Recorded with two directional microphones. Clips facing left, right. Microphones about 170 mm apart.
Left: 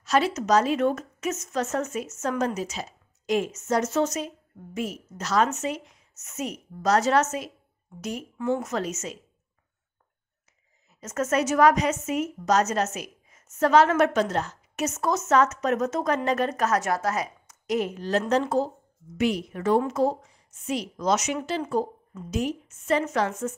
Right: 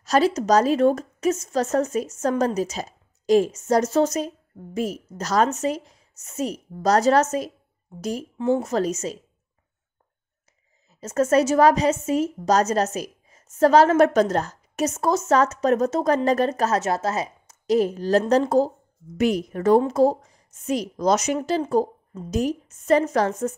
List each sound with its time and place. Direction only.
0.0 s a woman's voice: 40° right (ahead or behind)
10.9 s a woman's voice: 30° right (ahead or behind)